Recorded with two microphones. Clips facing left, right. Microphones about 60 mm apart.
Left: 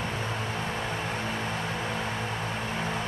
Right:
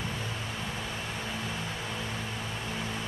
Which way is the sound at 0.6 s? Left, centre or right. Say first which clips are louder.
Left 5 dB; left.